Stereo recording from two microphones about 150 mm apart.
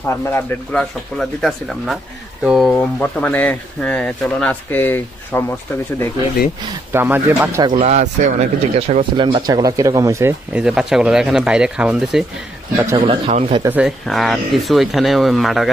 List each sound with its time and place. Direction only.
0.2 s speech: 10° left (ahead or behind)
2.7 s speech: 10° left (ahead or behind)
6.9 s speech: 15° right (ahead or behind)
7.8 s speech: 50° right (ahead or behind); by 10.3 s 20° right (ahead or behind)
10.5 s speech: 5° right (ahead or behind)
13.0 s speech: 35° right (ahead or behind)
13.3 s speech: 50° right (ahead or behind)
13.7 s speech: 10° right (ahead or behind)